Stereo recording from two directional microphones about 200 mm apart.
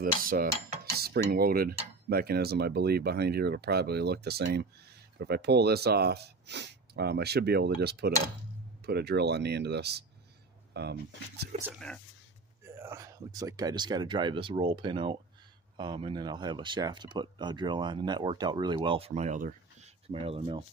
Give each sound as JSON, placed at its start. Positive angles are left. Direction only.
{"t": 0.0, "sound": "speech", "side_deg": -45}
{"t": 11.8, "sound": "speech", "side_deg": 5}
{"t": 12.6, "sound": "speech", "side_deg": -10}